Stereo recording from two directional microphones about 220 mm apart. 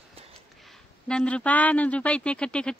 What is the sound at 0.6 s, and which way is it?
A man's voice, centre (ahead or behind).